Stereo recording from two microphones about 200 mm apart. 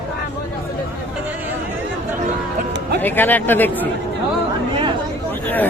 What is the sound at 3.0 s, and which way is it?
Speech, 10° left (ahead or behind).